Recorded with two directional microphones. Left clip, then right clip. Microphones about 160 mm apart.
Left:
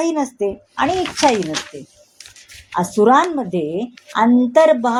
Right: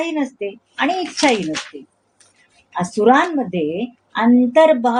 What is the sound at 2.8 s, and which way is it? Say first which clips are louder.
A woman's voice: left 1 dB; 30° left (ahead or behind).